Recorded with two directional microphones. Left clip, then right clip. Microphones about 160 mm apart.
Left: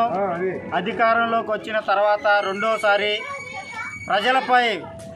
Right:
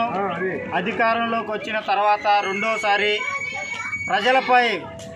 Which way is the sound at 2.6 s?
35° left (ahead or behind).